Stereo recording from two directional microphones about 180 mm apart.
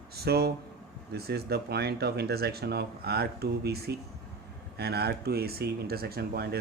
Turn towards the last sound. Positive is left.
turn(degrees=-60)  # may be behind; listen again after turning